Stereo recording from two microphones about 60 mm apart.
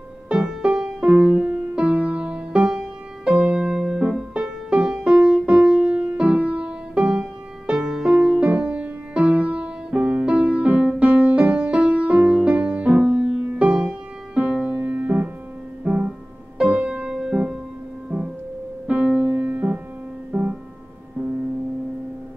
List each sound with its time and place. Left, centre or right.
0.3 s music: centre
18.9 s music: right